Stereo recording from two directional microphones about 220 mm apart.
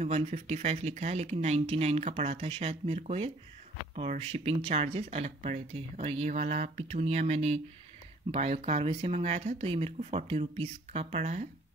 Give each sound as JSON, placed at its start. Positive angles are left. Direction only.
{"t": 0.0, "sound": "speech", "side_deg": -30}